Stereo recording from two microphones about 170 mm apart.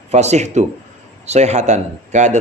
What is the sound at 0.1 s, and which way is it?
Speech, 40° right (ahead or behind).